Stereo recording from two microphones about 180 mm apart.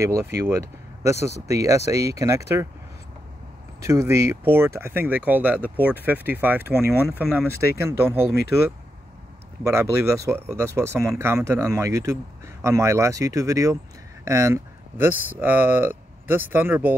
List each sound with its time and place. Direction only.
0.0 s speech: 15° right (ahead or behind)
3.8 s speech: 15° right (ahead or behind)
9.7 s speech: 15° right (ahead or behind)